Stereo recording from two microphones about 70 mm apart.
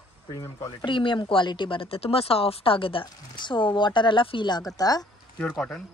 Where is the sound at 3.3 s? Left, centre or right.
Left.